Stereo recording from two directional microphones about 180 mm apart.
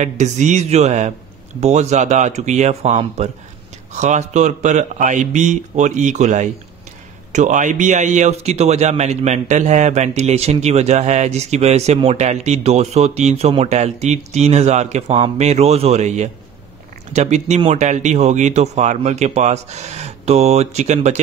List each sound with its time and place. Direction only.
0.0 s a man's voice: 40° right (ahead or behind)